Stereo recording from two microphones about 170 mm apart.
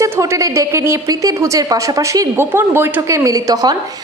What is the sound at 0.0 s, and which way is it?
A woman's voice, 20° right (ahead or behind).